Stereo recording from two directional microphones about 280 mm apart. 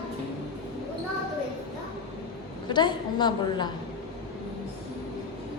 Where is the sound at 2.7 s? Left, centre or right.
Centre.